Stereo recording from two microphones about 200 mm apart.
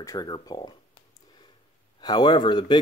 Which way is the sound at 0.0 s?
20° left (ahead or behind).